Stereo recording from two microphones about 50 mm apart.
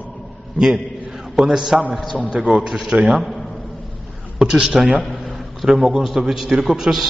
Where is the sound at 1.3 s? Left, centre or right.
Centre.